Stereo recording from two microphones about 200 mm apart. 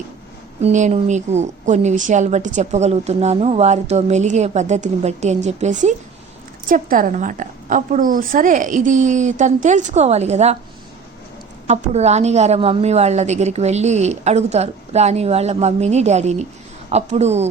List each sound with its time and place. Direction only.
0.6 s a woman's voice: 35° right (ahead or behind)
11.7 s a woman's voice: 35° right (ahead or behind)